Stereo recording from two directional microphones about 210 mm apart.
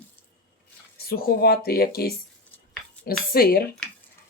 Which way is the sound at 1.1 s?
45° left (ahead or behind).